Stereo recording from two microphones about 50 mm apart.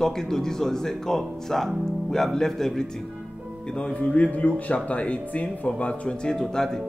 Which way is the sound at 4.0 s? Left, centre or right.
Left.